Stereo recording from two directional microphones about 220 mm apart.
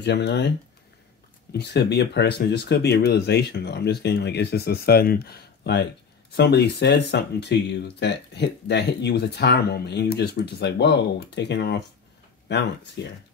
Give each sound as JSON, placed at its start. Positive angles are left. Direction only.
{"t": 0.0, "sound": "speech", "side_deg": 50}
{"t": 1.5, "sound": "speech", "side_deg": 50}